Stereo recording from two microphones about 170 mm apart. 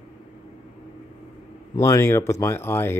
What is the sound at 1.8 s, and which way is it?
Speech, 15° left (ahead or behind).